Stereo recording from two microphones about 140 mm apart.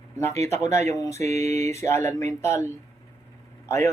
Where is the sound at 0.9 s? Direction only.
20° left (ahead or behind).